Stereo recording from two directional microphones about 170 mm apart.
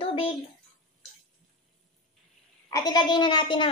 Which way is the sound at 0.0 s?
30° left (ahead or behind).